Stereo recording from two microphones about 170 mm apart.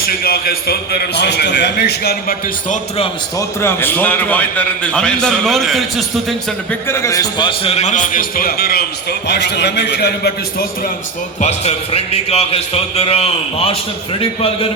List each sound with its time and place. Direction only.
0.0 s a man's voice: 60° left (ahead or behind)
3.6 s a man's voice: 15° left (ahead or behind)
6.8 s a man's voice: 15° left (ahead or behind); by 10.7 s 75° left (ahead or behind)
11.3 s a man's voice: 40° left (ahead or behind)